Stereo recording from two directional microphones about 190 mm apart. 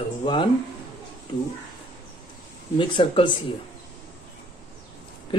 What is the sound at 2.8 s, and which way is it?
Speech, 25° left (ahead or behind).